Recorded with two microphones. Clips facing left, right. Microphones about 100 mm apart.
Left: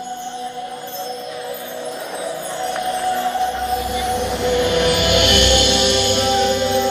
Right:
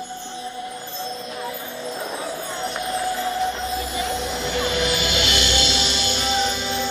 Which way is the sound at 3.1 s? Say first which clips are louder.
Left 4 dB; 60° left (ahead or behind).